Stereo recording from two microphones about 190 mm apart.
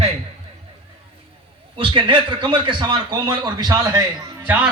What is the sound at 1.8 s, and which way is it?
A man's voice, 25° right (ahead or behind).